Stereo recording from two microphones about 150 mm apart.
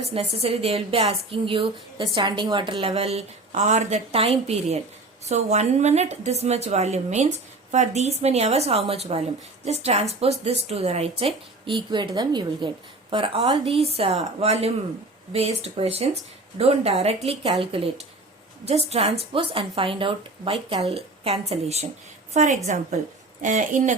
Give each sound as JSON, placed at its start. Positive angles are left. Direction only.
{"t": 0.0, "sound": "a woman's voice", "side_deg": -40}
{"t": 11.9, "sound": "a woman's voice", "side_deg": -30}